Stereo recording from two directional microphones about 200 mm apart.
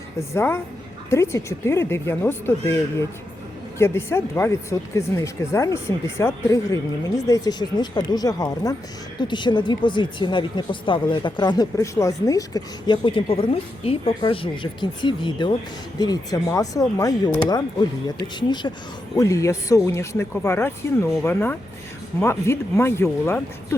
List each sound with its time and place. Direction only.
0.2 s speech: 10° left (ahead or behind)
22.2 s speech: 15° left (ahead or behind)